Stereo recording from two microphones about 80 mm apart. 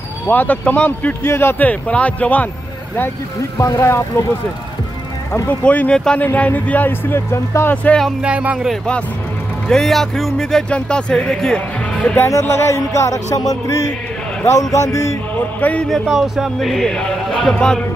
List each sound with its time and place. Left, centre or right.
0.3 s speech: left
1.2 s music: left
1.7 s speech: centre
3.5 s music: left
5.5 s speech: centre; by 7.7 s left
7.7 s speech: centre
8.2 s speech: centre
9.7 s speech: centre
12.3 s music: left
15.3 s speech: centre
15.9 s speech: centre